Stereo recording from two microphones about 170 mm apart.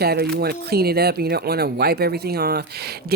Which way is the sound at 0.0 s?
70° right (ahead or behind).